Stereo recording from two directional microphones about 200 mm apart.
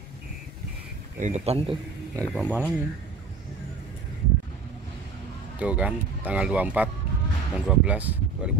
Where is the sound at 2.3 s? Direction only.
10° right (ahead or behind).